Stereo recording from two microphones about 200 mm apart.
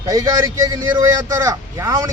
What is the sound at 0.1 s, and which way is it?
A man's voice, 15° right (ahead or behind).